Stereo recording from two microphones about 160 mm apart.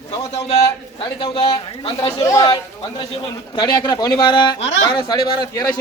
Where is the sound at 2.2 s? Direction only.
20° left (ahead or behind).